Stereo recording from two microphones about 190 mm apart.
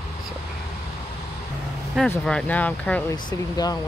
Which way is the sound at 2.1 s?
5° left (ahead or behind).